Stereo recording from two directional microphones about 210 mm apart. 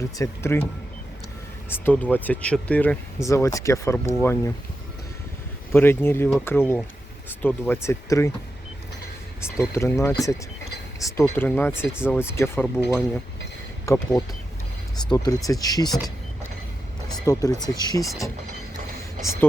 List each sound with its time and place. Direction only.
0.2 s speech: 10° left (ahead or behind)
1.7 s speech: 10° left (ahead or behind)
5.7 s speech: 10° left (ahead or behind)
9.6 s speech: 15° left (ahead or behind)
13.8 s speech: 15° left (ahead or behind)
17.2 s speech: 15° left (ahead or behind)
19.2 s speech: 15° left (ahead or behind)